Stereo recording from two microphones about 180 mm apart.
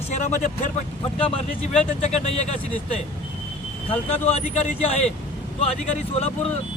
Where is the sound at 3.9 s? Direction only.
35° left (ahead or behind).